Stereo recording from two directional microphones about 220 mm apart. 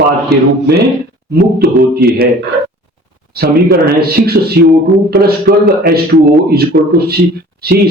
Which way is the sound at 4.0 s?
45° right (ahead or behind).